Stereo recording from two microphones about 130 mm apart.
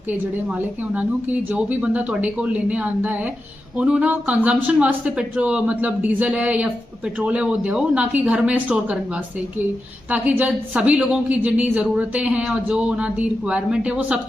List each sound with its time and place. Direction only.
0.4 s speech: 10° right (ahead or behind)